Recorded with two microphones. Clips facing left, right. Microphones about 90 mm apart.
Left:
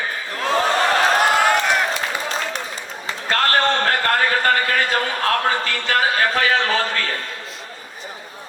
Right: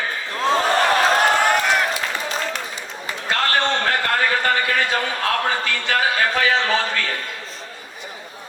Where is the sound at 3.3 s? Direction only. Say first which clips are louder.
Left 2 dB; 40° left (ahead or behind).